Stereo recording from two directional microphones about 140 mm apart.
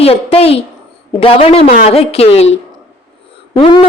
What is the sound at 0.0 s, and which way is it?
A woman's voice, 45° left (ahead or behind).